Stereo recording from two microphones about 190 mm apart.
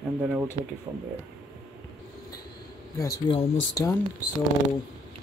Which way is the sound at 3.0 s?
20° left (ahead or behind).